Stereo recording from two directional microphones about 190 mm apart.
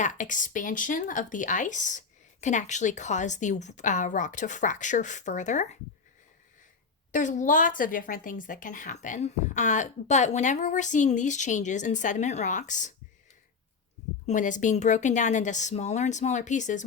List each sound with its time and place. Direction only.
0.0 s speech: 40° left (ahead or behind)
7.1 s speech: 40° left (ahead or behind)
14.3 s speech: 40° left (ahead or behind)